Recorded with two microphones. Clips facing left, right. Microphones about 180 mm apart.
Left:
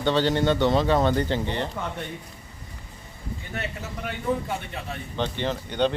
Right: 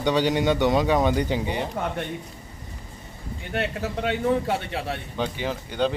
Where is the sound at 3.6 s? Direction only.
85° right.